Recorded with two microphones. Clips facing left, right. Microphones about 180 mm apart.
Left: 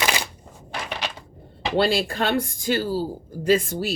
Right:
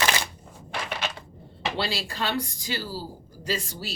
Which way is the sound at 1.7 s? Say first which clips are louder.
Left 12 dB; 50° left (ahead or behind).